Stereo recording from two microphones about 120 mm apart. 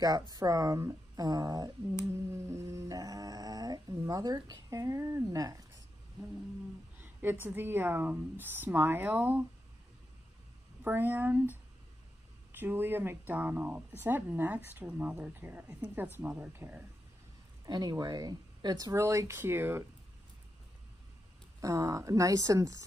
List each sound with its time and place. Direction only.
0.0 s speech: 30° right (ahead or behind)
7.0 s speech: 15° right (ahead or behind)
10.8 s speech: 15° right (ahead or behind)
12.5 s speech: 15° right (ahead or behind)
17.6 s speech: 35° right (ahead or behind); by 19.8 s 20° right (ahead or behind)
21.5 s speech: 25° right (ahead or behind)